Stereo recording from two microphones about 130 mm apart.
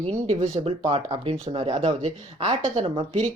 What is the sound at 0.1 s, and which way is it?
Speech, 50° right (ahead or behind).